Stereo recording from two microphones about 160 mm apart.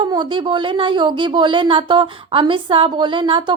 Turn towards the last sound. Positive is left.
turn(degrees=-30)  # may be behind; listen again after turning